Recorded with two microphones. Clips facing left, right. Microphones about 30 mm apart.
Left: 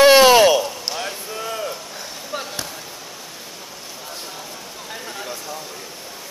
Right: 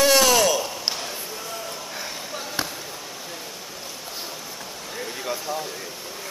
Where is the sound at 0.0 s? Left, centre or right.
Left.